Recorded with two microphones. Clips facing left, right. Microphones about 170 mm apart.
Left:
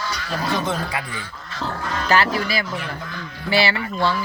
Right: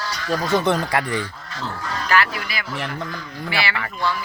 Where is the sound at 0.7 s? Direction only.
70° right (ahead or behind).